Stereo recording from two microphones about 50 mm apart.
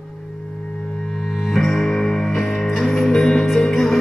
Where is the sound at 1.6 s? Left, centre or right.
Centre.